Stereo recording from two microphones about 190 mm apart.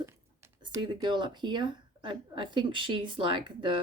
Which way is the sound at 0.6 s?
20° right (ahead or behind).